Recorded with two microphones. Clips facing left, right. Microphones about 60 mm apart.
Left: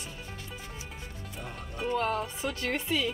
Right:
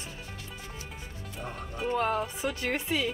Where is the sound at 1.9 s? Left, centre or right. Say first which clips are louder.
Right 1 dB; centre.